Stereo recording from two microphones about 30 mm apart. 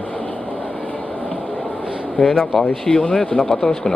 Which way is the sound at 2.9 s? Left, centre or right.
Left.